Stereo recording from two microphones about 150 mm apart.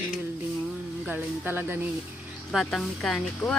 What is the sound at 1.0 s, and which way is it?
Speech, 10° right (ahead or behind).